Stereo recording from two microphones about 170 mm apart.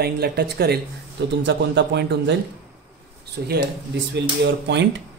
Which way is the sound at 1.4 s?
90° right.